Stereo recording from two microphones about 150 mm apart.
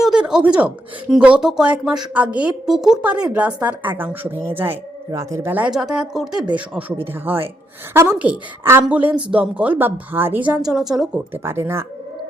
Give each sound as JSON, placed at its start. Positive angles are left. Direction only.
{"t": 0.0, "sound": "a woman's voice", "side_deg": -5}
{"t": 11.3, "sound": "a woman's voice", "side_deg": -15}